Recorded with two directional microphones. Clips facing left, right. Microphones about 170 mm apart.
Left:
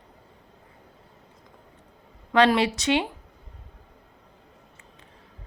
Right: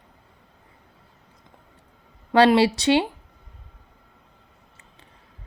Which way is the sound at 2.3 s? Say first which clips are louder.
Right 4 dB; 35° right (ahead or behind).